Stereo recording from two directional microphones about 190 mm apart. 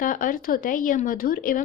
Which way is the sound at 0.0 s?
45° left (ahead or behind).